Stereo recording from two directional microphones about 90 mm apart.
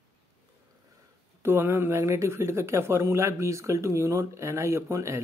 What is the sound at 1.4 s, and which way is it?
Speech, 25° right (ahead or behind).